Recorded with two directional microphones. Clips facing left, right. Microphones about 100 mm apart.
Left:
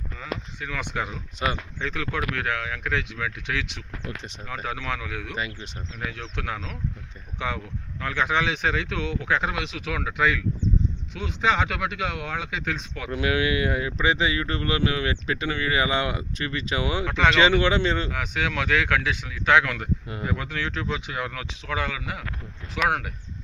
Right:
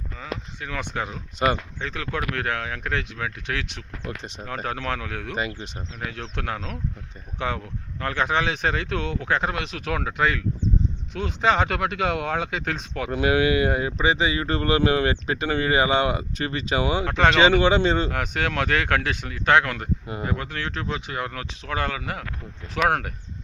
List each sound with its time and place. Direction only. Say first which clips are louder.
0.7 s speech: right 1 dB; 30° right (ahead or behind)
1.4 s speech: right 5 dB; 45° right (ahead or behind)
1.8 s speech: even; 30° right (ahead or behind)
4.4 s speech: right 2 dB; 45° right (ahead or behind)
13.1 s speech: right 4 dB; 30° right (ahead or behind)
18.1 s speech: right 2 dB; 50° right (ahead or behind)
20.1 s speech: right 1 dB; 30° right (ahead or behind)